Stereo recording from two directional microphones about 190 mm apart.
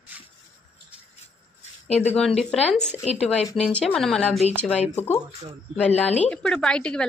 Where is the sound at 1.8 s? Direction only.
35° left (ahead or behind).